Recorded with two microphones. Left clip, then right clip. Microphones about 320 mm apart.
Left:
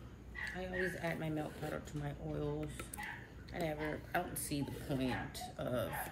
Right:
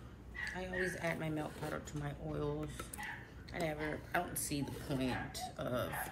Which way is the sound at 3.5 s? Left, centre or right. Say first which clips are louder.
Right 1 dB; centre.